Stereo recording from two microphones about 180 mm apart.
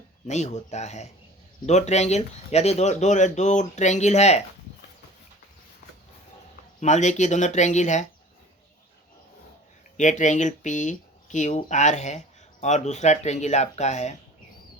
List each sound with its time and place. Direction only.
0.3 s speech: 40° left (ahead or behind)
6.7 s speech: 40° left (ahead or behind)
10.0 s speech: 45° left (ahead or behind)